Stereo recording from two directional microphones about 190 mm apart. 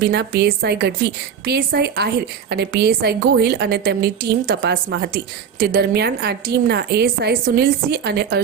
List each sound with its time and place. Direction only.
0.0 s a woman's voice: 60° right (ahead or behind)